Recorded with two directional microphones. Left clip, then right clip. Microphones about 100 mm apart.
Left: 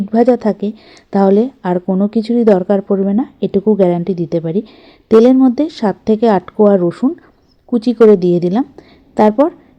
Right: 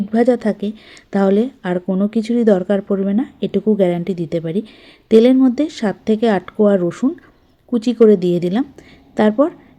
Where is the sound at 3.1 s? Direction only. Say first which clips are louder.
Left 4 dB; 30° left (ahead or behind).